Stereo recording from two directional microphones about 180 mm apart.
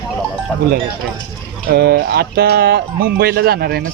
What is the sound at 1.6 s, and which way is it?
Speech, 60° right (ahead or behind).